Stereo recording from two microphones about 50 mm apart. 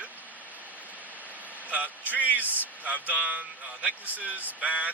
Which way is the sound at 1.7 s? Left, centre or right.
Right.